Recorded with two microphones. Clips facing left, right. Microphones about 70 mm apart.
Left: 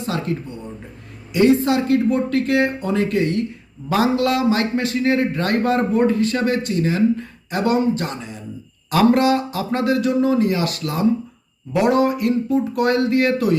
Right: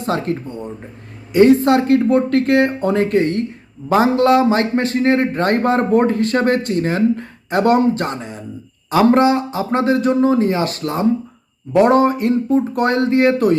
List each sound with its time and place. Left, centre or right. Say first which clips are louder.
0.0 s speech: right 4 dB; right
8.9 s speech: right 3 dB; right